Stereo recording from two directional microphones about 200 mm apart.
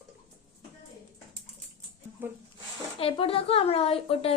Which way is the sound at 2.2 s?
10° right (ahead or behind).